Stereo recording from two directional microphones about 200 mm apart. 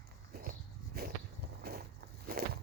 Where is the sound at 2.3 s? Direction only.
50° right (ahead or behind).